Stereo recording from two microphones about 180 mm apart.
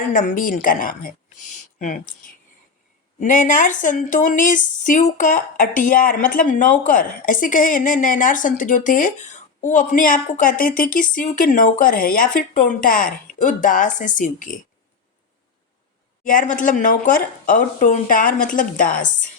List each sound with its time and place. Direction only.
0.1 s a woman's voice: 45° left (ahead or behind)
3.2 s a woman's voice: 45° left (ahead or behind)
16.2 s a woman's voice: 45° left (ahead or behind)